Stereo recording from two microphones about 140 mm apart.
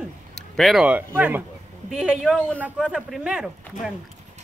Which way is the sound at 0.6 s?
Centre (ahead or behind).